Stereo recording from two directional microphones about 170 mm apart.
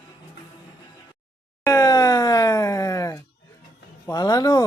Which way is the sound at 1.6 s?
20° left (ahead or behind).